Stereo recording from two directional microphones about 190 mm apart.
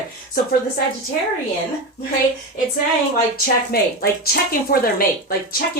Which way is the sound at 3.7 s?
55° left (ahead or behind).